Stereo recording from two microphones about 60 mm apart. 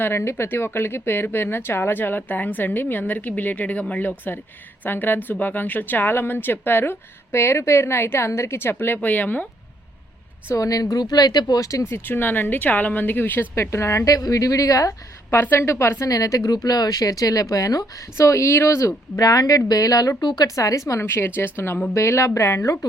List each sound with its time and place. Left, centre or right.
0.0 s a woman's voice: left
9.0 s speech: left
10.5 s a woman's voice: left
13.6 s a woman's voice: left
15.3 s a woman's voice: left
16.0 s a woman's voice: left
21.0 s a woman's voice: left
21.9 s a woman's voice: left
22.6 s a woman's voice: left